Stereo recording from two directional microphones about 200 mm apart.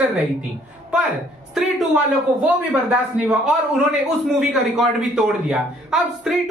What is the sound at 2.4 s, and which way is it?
Speech, 10° right (ahead or behind).